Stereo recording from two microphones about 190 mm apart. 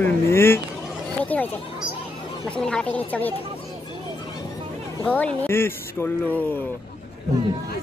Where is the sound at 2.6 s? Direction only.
5° left (ahead or behind).